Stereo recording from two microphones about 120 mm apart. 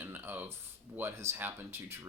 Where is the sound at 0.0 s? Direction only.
15° right (ahead or behind).